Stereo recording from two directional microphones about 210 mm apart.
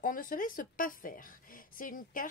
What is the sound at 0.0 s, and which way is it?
A woman's voice, 40° left (ahead or behind).